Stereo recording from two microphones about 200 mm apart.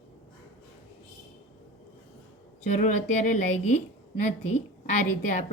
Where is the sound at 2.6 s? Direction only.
35° left (ahead or behind).